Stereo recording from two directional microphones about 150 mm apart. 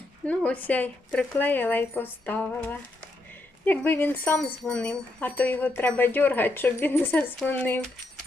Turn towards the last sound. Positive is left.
turn(degrees=10)  # may be behind; listen again after turning